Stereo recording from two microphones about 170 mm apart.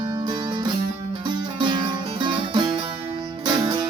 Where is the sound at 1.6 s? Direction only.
25° right (ahead or behind).